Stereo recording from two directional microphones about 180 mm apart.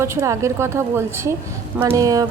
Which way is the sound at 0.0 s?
15° right (ahead or behind).